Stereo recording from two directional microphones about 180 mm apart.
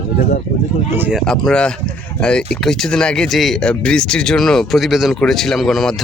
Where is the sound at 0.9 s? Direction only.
10° right (ahead or behind).